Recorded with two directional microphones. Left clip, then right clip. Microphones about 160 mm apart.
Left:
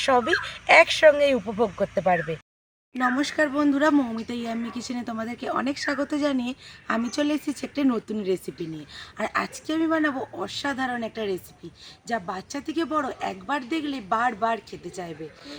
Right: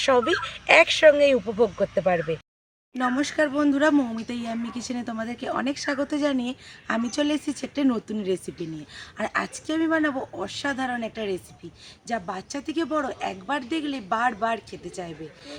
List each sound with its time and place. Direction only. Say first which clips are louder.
0.0 s speech: even; 15° right (ahead or behind)
3.0 s speech: even; 5° right (ahead or behind)